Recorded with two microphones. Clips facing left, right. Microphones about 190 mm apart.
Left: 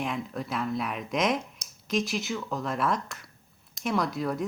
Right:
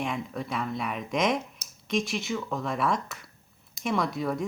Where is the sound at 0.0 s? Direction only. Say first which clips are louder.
Even; centre (ahead or behind).